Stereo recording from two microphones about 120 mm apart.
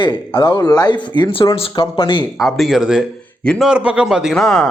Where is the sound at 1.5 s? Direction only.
50° left (ahead or behind).